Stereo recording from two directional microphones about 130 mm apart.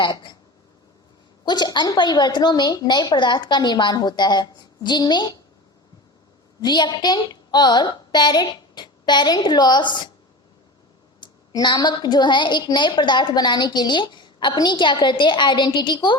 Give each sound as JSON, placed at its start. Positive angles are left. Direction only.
{"t": 0.0, "sound": "a sound", "side_deg": 35}
{"t": 1.5, "sound": "a woman's voice", "side_deg": 35}
{"t": 6.6, "sound": "a woman's voice", "side_deg": 35}
{"t": 11.2, "sound": "a woman's voice", "side_deg": 35}